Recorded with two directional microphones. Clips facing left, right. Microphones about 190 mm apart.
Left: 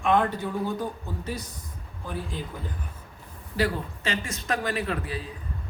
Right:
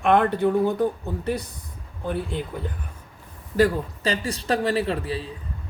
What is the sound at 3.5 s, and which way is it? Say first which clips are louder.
A man's voice: right 7 dB; 40° right (ahead or behind).